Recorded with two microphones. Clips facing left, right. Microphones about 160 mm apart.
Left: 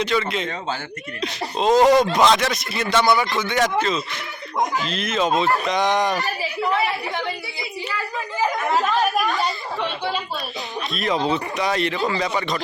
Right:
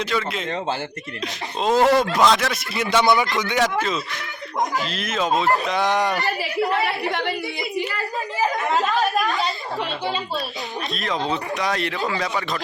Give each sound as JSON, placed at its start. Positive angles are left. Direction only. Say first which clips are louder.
{"t": 0.0, "sound": "speech", "louder": "left 2 dB", "side_deg": 0}
{"t": 2.8, "sound": "a man's voice", "louder": "even", "side_deg": -20}
{"t": 3.5, "sound": "speech", "louder": "left 2 dB", "side_deg": -5}
{"t": 8.7, "sound": "chatter", "louder": "left 2 dB", "side_deg": 0}
{"t": 10.9, "sound": "speech", "louder": "left 4 dB", "side_deg": 5}